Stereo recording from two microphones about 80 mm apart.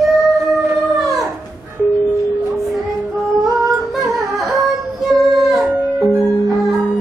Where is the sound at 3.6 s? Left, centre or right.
Centre.